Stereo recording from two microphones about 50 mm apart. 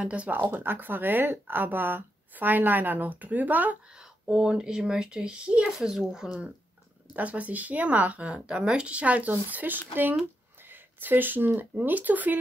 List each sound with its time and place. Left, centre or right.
0.0 s speech: right
3.9 s speech: centre
7.2 s speech: right
8.3 s speech: centre; by 12.4 s right